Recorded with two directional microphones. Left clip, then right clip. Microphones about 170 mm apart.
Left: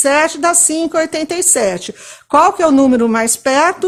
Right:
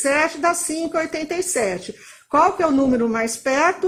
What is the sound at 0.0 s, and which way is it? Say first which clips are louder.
A woman's voice: left 6 dB; 25° left (ahead or behind).